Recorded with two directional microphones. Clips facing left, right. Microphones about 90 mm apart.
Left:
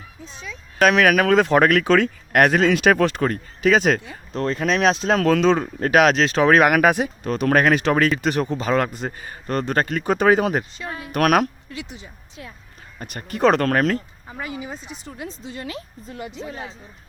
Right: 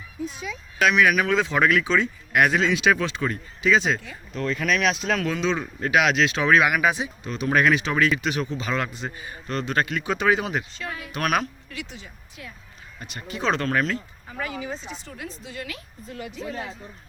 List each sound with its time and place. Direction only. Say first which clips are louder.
0.8 s speech: left 4 dB; 50° left (ahead or behind)
4.0 s speech: left 4 dB; 30° left (ahead or behind)
10.8 s a woman's voice: left 2 dB; 30° left (ahead or behind)
11.1 s a woman's voice: left 7 dB; 55° left (ahead or behind)
11.7 s a woman's voice: left 2 dB; 20° left (ahead or behind)
12.4 s speech: left 3 dB; 35° left (ahead or behind)
13.0 s speech: left 11 dB; 50° left (ahead or behind)
14.3 s a woman's voice: right 2 dB; 15° left (ahead or behind)